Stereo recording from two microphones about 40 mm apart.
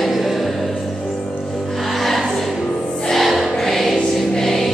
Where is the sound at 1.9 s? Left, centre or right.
Centre.